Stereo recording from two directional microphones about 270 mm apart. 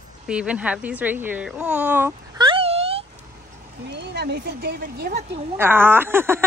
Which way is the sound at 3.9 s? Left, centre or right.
Right.